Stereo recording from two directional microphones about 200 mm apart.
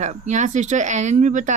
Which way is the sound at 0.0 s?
35° right (ahead or behind).